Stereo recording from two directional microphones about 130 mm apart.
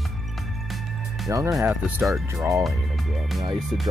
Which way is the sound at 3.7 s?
35° right (ahead or behind).